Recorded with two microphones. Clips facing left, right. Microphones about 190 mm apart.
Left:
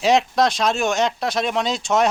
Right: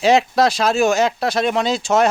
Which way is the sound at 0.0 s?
Centre (ahead or behind).